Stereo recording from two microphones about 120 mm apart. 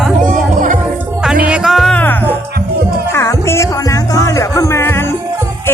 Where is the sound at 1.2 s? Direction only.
5° right (ahead or behind).